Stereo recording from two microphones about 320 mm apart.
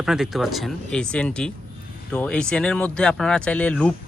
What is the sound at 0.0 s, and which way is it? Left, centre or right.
A man's voice, centre.